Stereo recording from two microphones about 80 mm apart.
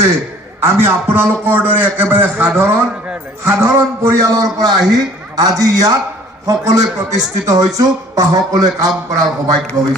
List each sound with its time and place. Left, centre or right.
0.6 s a man's voice: right